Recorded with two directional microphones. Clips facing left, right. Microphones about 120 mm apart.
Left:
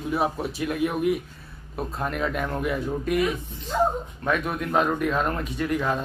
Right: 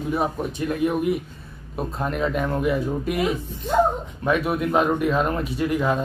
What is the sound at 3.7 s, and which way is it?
Speech, 65° right (ahead or behind).